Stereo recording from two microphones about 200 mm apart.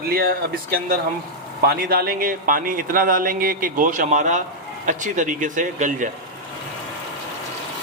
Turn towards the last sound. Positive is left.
turn(degrees=-40)  # may be behind; listen again after turning